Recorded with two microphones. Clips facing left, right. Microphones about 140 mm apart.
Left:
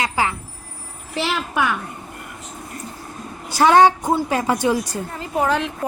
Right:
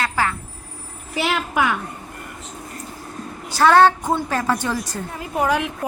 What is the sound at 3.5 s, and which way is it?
A woman's voice, 15° left (ahead or behind).